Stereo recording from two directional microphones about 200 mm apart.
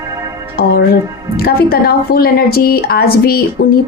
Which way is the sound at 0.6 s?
50° left (ahead or behind).